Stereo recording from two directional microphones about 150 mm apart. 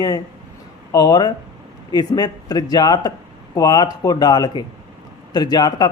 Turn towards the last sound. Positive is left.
turn(degrees=25)  # may be behind; listen again after turning